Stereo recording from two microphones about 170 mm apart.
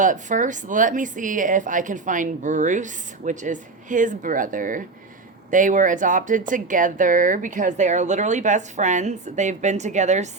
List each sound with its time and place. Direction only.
0.0 s speech: 50° right (ahead or behind)